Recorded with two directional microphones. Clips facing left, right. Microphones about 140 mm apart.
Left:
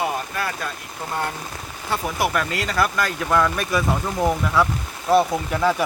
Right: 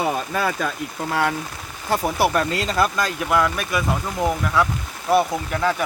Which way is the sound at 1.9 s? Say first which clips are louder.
Right 4 dB; 40° right (ahead or behind).